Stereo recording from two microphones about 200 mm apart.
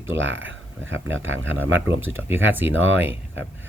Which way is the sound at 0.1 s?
70° right (ahead or behind).